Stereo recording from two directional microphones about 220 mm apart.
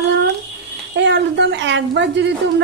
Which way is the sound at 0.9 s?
55° right (ahead or behind).